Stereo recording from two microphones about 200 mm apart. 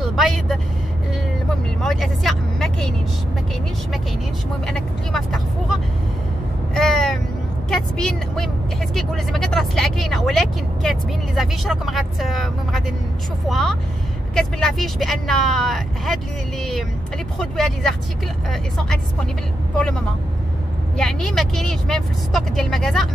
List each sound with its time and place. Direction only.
0.0 s vehicle: centre (ahead or behind)
1.8 s vehicle: centre (ahead or behind)
4.6 s vehicle: centre (ahead or behind)
7.7 s speech: 5° left (ahead or behind)
17.4 s speech: centre (ahead or behind)
21.0 s speech: centre (ahead or behind)